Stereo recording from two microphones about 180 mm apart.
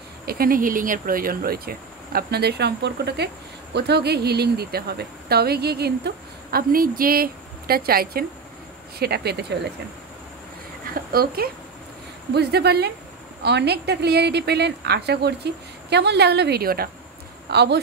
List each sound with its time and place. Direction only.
0.2 s speech: 55° right (ahead or behind)
11.1 s speech: 55° right (ahead or behind)
17.5 s speech: 65° right (ahead or behind)